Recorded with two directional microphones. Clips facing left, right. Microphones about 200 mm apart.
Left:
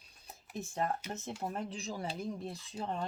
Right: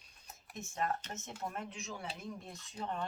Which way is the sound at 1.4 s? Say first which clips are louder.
Left 2 dB; 35° left (ahead or behind).